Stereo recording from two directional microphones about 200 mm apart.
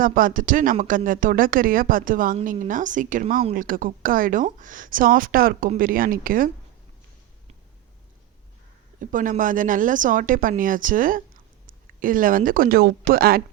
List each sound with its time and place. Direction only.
0.0 s speech: 45° right (ahead or behind)
9.0 s a woman's voice: 40° right (ahead or behind)